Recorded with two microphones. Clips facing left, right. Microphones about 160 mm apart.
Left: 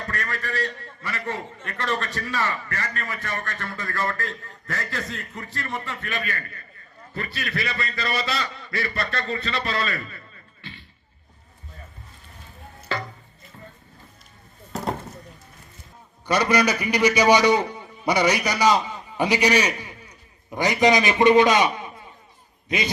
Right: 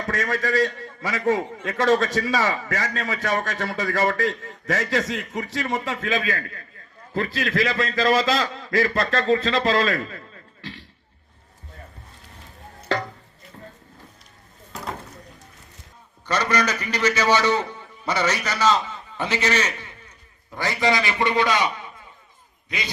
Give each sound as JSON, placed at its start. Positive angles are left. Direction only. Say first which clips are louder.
{"t": 0.0, "sound": "a man's voice", "louder": "right 6 dB", "side_deg": -90}
{"t": 12.9, "sound": "a sound", "louder": "right 5 dB", "side_deg": -75}
{"t": 16.2, "sound": "a man's voice", "louder": "left 3 dB", "side_deg": 10}